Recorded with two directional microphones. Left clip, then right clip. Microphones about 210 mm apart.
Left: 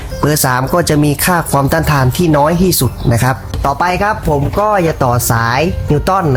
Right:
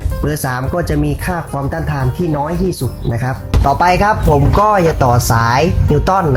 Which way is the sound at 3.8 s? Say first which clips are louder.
Right 2 dB; 20° left (ahead or behind).